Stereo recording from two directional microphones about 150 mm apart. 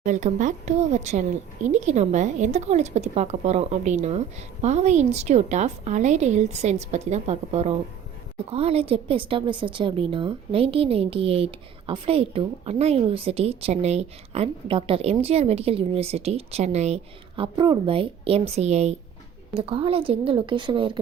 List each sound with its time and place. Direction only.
0.0 s a woman's voice: 55° right (ahead or behind); by 21.0 s 35° right (ahead or behind)